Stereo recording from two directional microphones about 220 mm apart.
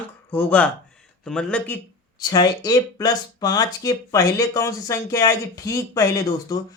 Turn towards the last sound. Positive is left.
turn(degrees=15)  # may be behind; listen again after turning